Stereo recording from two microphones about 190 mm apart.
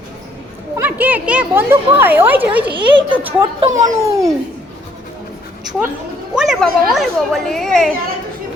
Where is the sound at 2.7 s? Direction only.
25° right (ahead or behind).